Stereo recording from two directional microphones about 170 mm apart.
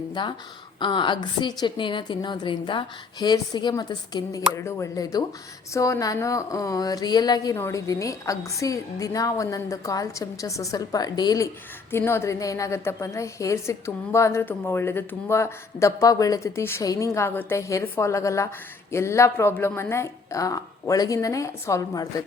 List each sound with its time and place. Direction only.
0.1 s a woman's voice: 25° left (ahead or behind)